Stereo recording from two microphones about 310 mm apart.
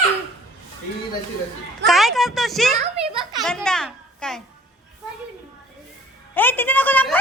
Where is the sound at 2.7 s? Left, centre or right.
Right.